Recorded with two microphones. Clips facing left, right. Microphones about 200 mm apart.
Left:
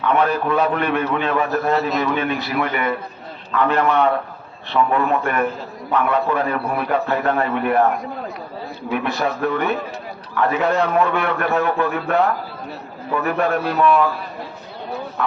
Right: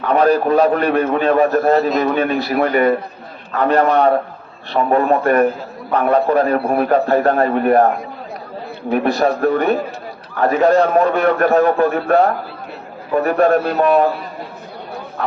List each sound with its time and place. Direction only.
0.0 s a man's voice: 40° right (ahead or behind)